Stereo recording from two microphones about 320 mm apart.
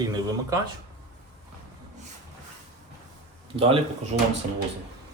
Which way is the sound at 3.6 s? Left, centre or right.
Centre.